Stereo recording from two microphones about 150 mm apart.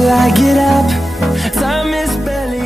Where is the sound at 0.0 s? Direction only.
Centre (ahead or behind).